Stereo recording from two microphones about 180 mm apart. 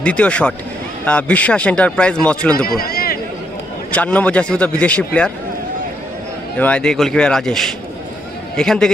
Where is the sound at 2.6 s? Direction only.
55° left (ahead or behind).